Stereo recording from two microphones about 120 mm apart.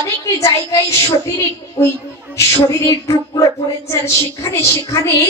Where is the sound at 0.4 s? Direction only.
25° left (ahead or behind).